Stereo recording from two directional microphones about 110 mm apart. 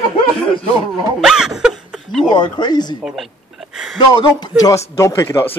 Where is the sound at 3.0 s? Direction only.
Centre (ahead or behind).